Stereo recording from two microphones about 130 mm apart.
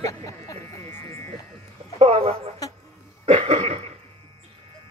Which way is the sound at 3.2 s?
50° right (ahead or behind).